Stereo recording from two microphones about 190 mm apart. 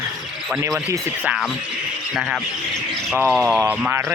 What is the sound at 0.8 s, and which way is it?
Speech, 15° right (ahead or behind).